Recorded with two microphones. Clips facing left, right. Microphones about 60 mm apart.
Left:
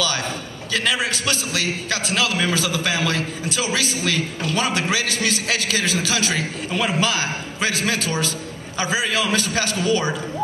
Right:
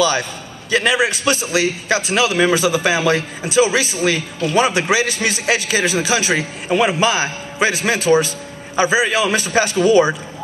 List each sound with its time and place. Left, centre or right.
0.7 s a man's voice: centre